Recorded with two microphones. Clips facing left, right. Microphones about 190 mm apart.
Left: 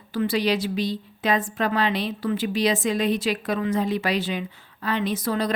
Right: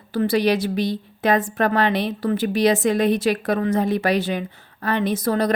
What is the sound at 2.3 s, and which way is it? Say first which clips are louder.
A woman's voice: right 4 dB; 45° right (ahead or behind).